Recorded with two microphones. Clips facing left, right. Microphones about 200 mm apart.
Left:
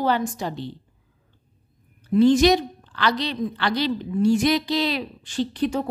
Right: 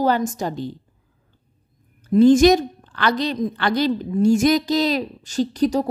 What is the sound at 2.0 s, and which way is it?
A woman's voice, 45° right (ahead or behind).